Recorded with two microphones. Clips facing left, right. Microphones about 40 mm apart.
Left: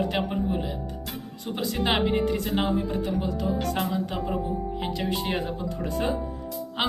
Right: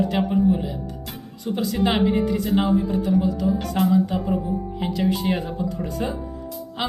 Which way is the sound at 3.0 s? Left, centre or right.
Left.